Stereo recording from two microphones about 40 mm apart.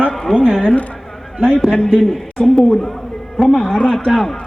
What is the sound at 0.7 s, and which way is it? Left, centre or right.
Speech, left.